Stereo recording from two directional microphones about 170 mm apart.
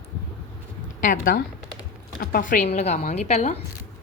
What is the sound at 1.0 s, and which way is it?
A woman's voice, 55° left (ahead or behind).